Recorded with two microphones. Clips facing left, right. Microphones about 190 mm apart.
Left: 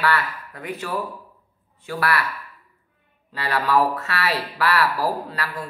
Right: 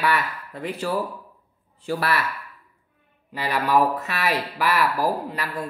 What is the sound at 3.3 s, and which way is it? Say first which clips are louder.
Speech: even; 15° right (ahead or behind).